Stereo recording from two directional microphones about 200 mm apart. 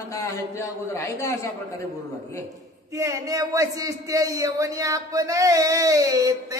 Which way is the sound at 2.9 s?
15° right (ahead or behind).